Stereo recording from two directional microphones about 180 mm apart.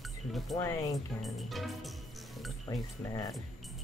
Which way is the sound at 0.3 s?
Centre (ahead or behind).